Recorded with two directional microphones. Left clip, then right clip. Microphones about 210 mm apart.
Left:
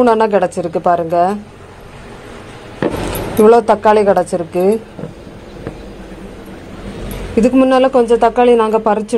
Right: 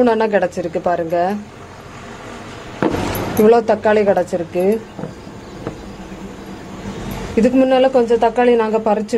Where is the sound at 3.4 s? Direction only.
15° left (ahead or behind).